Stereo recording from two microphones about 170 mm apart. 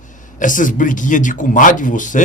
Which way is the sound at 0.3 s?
50° left (ahead or behind).